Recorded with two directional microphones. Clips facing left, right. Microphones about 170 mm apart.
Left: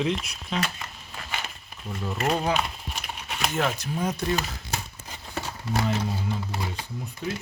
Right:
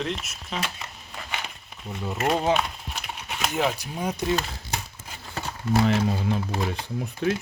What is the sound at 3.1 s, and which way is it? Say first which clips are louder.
Horse: right 1 dB; 10° right (ahead or behind).